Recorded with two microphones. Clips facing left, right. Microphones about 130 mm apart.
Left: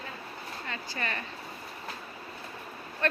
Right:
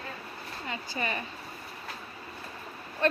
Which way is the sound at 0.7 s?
15° right (ahead or behind).